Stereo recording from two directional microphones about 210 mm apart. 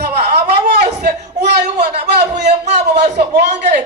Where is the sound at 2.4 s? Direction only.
50° right (ahead or behind).